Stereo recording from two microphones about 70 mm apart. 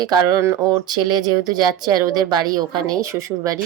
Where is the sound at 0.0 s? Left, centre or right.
Right.